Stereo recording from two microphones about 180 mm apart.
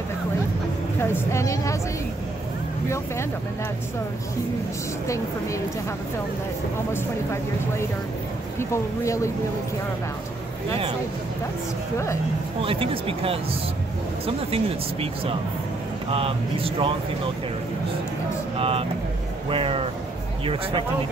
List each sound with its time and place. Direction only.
1.0 s a woman's voice: 15° left (ahead or behind)
5.0 s a woman's voice: 15° left (ahead or behind)
8.5 s a woman's voice: 15° left (ahead or behind)
12.6 s speech: 30° right (ahead or behind)
18.6 s speech: 30° right (ahead or behind)